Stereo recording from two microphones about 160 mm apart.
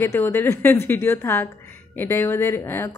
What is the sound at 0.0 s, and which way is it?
A woman's voice, 15° left (ahead or behind).